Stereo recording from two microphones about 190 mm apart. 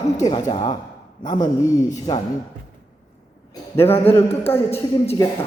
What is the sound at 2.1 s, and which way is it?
Speech, 25° left (ahead or behind).